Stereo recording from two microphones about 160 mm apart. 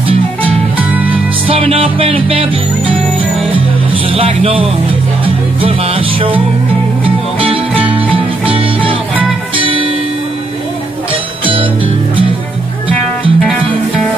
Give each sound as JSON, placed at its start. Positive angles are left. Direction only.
{"t": 1.5, "sound": "music", "side_deg": -35}
{"t": 3.5, "sound": "music", "side_deg": -35}
{"t": 12.9, "sound": "music", "side_deg": 5}